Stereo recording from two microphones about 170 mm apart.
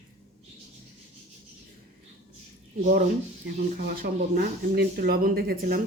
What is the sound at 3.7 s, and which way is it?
Speech, 60° right (ahead or behind).